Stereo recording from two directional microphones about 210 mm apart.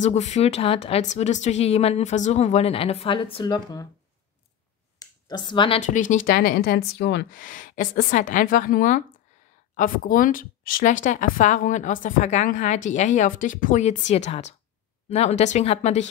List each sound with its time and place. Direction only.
0.0 s a woman's voice: 30° left (ahead or behind)
4.9 s a sound: 20° left (ahead or behind)
5.8 s a woman's voice: 35° left (ahead or behind)